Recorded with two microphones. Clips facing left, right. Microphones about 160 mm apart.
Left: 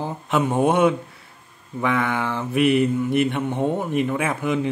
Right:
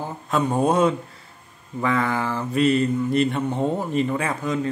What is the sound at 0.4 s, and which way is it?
Speech, 5° left (ahead or behind).